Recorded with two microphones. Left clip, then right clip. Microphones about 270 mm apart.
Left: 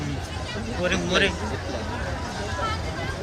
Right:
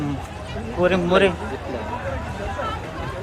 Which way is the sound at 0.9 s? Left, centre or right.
Centre.